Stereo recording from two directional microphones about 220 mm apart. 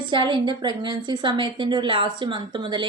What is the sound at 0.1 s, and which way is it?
A woman's voice, 20° right (ahead or behind).